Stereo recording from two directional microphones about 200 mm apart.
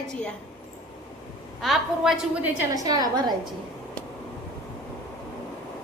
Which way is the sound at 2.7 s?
20° right (ahead or behind).